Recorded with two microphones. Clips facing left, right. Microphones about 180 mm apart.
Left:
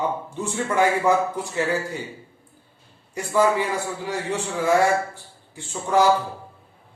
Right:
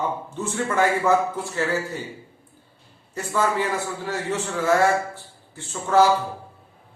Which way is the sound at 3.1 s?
15° left (ahead or behind).